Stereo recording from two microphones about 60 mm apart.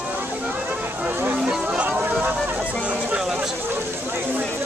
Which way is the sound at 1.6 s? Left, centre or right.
Right.